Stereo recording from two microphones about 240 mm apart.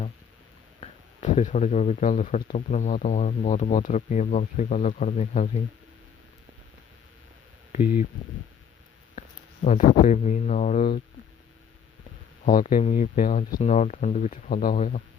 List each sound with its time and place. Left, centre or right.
0.8 s speech: left
9.6 s speech: left
12.5 s speech: left